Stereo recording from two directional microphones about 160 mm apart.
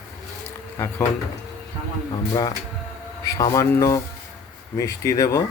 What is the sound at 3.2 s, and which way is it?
Speech, 20° left (ahead or behind).